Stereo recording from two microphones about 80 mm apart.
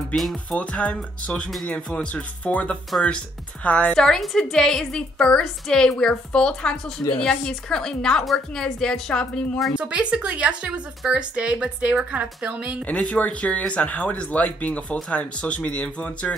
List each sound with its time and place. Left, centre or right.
0.1 s speech: centre
0.6 s a woman's voice: centre
3.9 s a woman's voice: centre
9.8 s speech: centre
12.8 s a woman's voice: centre